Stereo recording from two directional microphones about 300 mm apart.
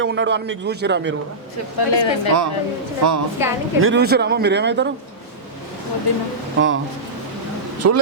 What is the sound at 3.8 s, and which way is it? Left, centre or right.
A man's voice, right.